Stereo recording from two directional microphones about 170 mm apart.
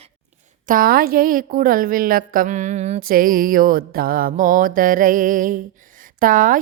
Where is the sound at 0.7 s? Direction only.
60° right (ahead or behind); by 3.1 s 40° right (ahead or behind).